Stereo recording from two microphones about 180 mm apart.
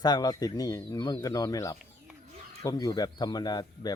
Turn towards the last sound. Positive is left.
turn(degrees=20)  # may be behind; listen again after turning